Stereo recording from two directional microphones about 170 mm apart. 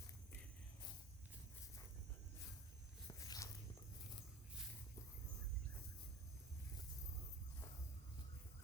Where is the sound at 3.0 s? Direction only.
20° left (ahead or behind).